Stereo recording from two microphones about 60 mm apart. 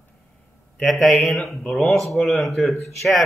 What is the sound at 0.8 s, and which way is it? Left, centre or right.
A man's voice, centre.